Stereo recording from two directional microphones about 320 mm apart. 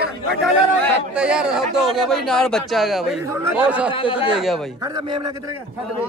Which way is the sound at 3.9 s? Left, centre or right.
Centre.